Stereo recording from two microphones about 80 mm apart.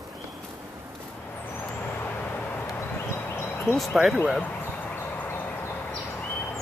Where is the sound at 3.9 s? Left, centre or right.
Centre.